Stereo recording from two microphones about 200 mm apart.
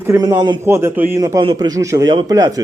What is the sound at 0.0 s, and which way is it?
A man's voice, 15° right (ahead or behind).